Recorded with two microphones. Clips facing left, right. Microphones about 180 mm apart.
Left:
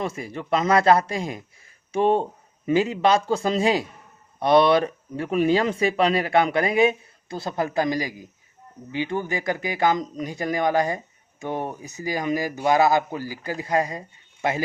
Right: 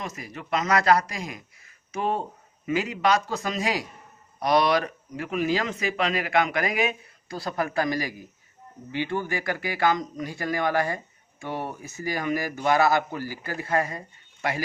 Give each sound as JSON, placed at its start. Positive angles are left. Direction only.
{"t": 0.0, "sound": "speech", "side_deg": 30}